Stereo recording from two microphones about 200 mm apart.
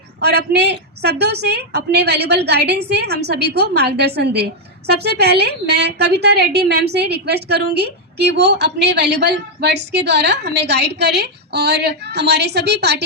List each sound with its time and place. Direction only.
0.2 s a woman's voice: 55° right (ahead or behind)